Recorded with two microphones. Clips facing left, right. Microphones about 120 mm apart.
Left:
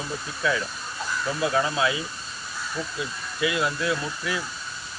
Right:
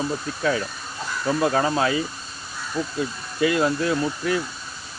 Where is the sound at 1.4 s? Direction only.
45° right (ahead or behind).